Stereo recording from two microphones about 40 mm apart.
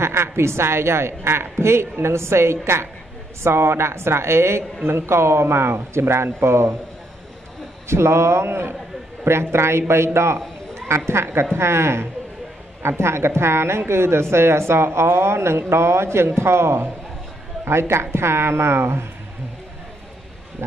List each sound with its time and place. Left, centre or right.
0.0 s a woman's voice: right
7.9 s a woman's voice: right